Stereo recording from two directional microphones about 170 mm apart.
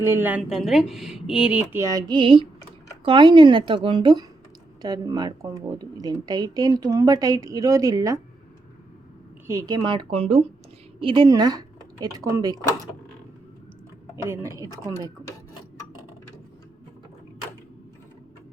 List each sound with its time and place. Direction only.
0.0 s a woman's voice: 15° right (ahead or behind)
1.7 s speech: 20° right (ahead or behind)
9.5 s speech: 20° right (ahead or behind)
14.3 s speech: 20° right (ahead or behind)